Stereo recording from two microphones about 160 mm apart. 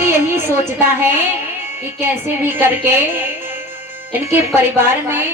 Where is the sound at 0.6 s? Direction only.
15° right (ahead or behind).